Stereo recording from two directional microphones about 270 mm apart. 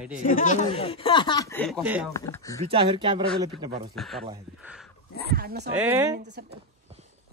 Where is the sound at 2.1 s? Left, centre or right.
Centre.